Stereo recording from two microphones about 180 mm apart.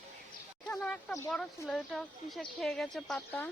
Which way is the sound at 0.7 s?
5° left (ahead or behind).